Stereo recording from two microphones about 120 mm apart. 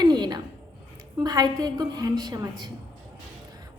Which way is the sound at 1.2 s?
35° right (ahead or behind).